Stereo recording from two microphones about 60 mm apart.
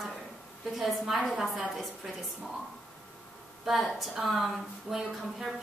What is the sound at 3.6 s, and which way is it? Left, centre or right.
A woman's voice, centre.